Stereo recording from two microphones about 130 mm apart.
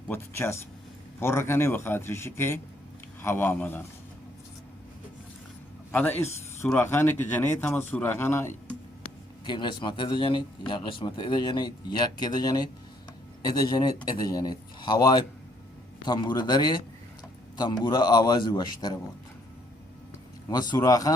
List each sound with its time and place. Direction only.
0.1 s a man's voice: 20° left (ahead or behind)
5.9 s a man's voice: 15° left (ahead or behind)
9.5 s speech: 35° left (ahead or behind)
20.5 s speech: 30° left (ahead or behind)